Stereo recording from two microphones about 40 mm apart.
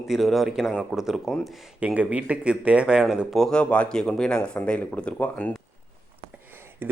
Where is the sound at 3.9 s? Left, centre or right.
Centre.